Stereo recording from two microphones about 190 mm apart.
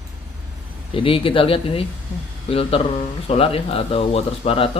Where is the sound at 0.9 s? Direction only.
30° left (ahead or behind).